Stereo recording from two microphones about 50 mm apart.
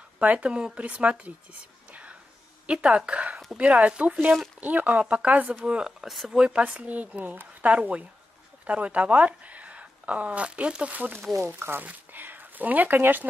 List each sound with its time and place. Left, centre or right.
0.2 s speech: right
0.5 s speech: centre
0.7 s speech: right
5.7 s speech: centre
6.4 s speech: right